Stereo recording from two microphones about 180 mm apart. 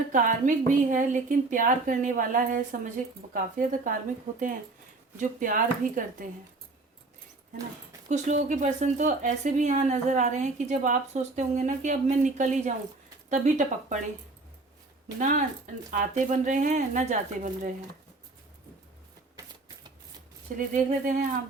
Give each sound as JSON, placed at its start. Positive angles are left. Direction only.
{"t": 0.1, "sound": "a woman's voice", "side_deg": -45}
{"t": 8.1, "sound": "speech", "side_deg": -40}
{"t": 15.2, "sound": "a woman's voice", "side_deg": -45}
{"t": 20.6, "sound": "a woman's voice", "side_deg": -45}